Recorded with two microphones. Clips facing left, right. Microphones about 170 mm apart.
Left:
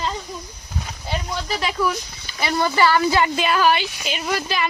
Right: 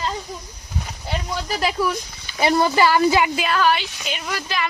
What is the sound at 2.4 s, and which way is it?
A woman's voice, 15° right (ahead or behind).